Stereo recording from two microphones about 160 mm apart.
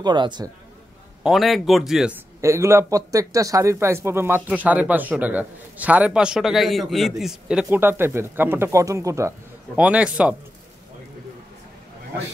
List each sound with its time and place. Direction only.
0.0 s a man's voice: 30° right (ahead or behind)
1.2 s speech: centre (ahead or behind)
2.4 s a man's voice: 20° right (ahead or behind)
9.8 s a man's voice: 5° right (ahead or behind)